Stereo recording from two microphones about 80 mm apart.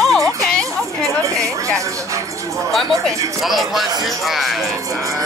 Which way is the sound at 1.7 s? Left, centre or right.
Right.